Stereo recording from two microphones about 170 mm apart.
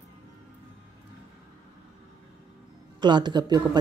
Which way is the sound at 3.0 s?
25° right (ahead or behind).